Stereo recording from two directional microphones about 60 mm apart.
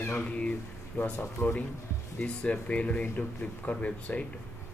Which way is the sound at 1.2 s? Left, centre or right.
Left.